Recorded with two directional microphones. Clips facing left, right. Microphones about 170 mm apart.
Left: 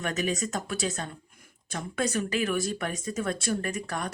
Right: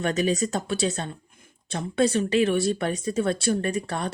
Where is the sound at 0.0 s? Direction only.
35° right (ahead or behind).